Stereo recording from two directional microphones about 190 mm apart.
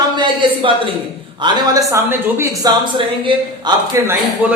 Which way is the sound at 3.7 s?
20° right (ahead or behind).